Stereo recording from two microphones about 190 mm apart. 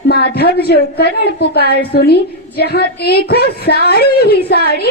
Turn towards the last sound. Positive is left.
turn(degrees=55)  # may be behind; listen again after turning